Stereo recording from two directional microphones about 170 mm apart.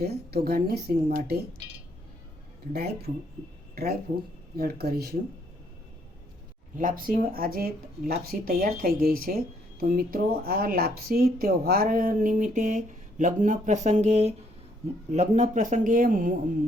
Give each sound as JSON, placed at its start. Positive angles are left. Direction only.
{"t": 0.0, "sound": "a woman's voice", "side_deg": -70}
{"t": 2.7, "sound": "a woman's voice", "side_deg": -70}
{"t": 4.5, "sound": "a woman's voice", "side_deg": -65}
{"t": 6.7, "sound": "speech", "side_deg": -55}